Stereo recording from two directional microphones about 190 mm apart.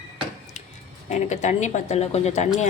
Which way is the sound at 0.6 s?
35° left (ahead or behind).